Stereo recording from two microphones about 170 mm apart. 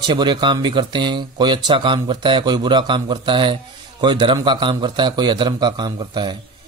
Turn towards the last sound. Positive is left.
turn(degrees=-25)  # may be behind; listen again after turning